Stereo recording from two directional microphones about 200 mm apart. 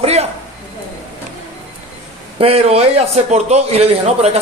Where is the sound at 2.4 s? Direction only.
30° right (ahead or behind).